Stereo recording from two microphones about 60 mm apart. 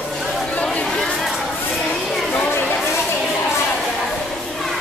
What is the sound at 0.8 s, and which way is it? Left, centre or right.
Chatter, centre.